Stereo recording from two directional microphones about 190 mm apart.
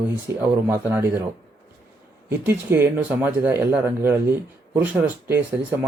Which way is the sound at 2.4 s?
10° right (ahead or behind).